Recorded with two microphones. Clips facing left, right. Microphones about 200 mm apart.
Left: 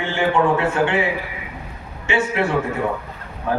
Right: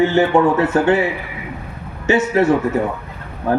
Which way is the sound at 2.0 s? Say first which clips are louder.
Right 6 dB; 40° right (ahead or behind).